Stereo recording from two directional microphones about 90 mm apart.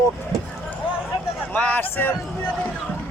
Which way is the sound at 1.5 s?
15° left (ahead or behind).